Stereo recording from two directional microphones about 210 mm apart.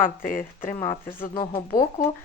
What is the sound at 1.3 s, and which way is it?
Speech, 25° left (ahead or behind).